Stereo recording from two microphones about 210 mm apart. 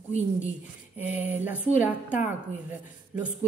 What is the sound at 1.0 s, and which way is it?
A woman's voice, 10° right (ahead or behind).